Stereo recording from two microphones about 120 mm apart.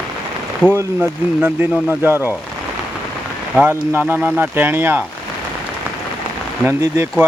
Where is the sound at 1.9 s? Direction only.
20° right (ahead or behind).